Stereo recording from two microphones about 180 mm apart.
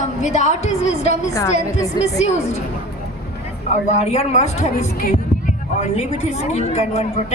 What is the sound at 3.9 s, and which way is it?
A woman's voice, 40° left (ahead or behind).